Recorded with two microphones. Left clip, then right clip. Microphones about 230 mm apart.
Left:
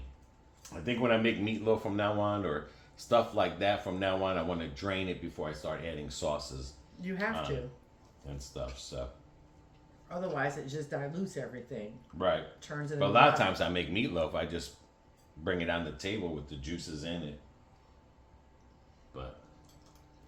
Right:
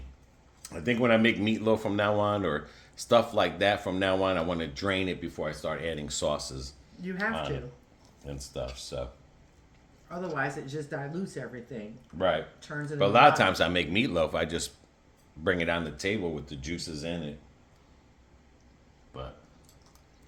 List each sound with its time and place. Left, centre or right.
0.7 s speech: right
8.5 s speech: right
10.1 s speech: centre
12.1 s speech: right
12.5 s speech: centre
13.0 s speech: right